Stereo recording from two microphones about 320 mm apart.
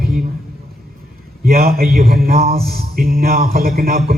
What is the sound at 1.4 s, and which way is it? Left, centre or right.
A man's voice, right.